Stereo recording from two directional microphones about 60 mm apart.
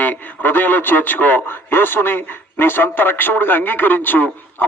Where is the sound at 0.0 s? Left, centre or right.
Left.